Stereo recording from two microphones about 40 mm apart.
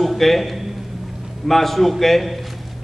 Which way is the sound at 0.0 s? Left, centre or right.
Centre.